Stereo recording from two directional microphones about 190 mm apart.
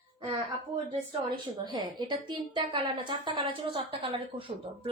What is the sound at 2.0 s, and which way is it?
A woman's voice, 25° right (ahead or behind).